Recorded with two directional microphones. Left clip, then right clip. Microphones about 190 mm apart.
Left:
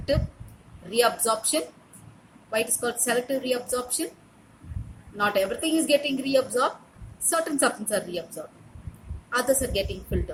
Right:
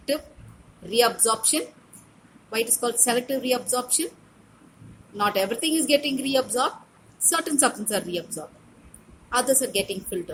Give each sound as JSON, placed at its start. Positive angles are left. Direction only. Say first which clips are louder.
{"t": 0.9, "sound": "a woman's voice", "louder": "right 1 dB", "side_deg": -25}
{"t": 5.1, "sound": "a woman's voice", "louder": "right 1 dB", "side_deg": -25}
{"t": 9.3, "sound": "a woman's voice", "louder": "right 1 dB", "side_deg": -25}